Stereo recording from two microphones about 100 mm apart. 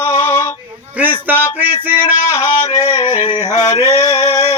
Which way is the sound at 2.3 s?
30° left (ahead or behind).